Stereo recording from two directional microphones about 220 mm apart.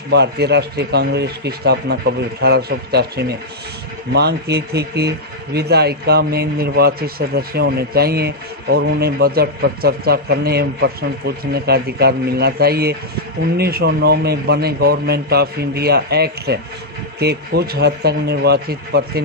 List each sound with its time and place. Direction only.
0.1 s a man's voice: 50° right (ahead or behind)